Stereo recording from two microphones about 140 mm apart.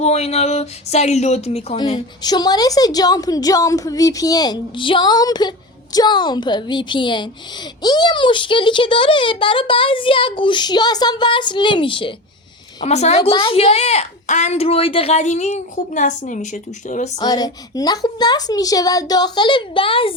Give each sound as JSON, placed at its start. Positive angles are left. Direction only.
{"t": 0.0, "sound": "a woman's voice", "side_deg": 50}
{"t": 1.8, "sound": "a woman's voice", "side_deg": 30}
{"t": 12.8, "sound": "a woman's voice", "side_deg": 55}
{"t": 13.3, "sound": "a woman's voice", "side_deg": 40}
{"t": 17.2, "sound": "a woman's voice", "side_deg": 25}